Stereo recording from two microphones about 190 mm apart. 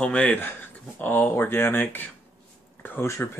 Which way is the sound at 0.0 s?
5° left (ahead or behind).